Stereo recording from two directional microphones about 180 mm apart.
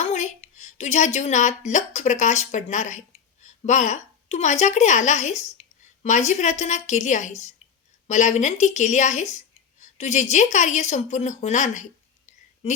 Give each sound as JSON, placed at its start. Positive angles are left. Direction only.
{"t": 0.0, "sound": "a woman's voice", "side_deg": 40}